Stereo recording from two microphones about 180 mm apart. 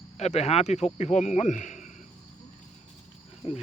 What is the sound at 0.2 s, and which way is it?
Speech, 35° left (ahead or behind).